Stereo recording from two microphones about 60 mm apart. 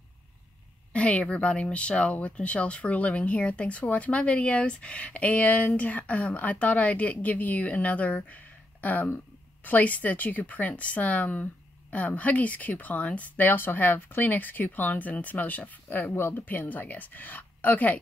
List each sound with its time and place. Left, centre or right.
0.9 s speech: left